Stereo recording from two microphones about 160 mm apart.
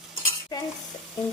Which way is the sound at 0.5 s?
25° left (ahead or behind).